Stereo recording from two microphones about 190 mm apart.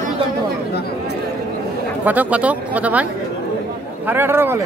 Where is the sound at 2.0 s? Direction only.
10° right (ahead or behind).